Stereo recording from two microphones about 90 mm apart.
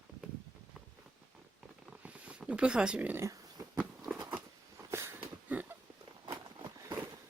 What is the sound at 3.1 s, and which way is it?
Speech, 30° right (ahead or behind).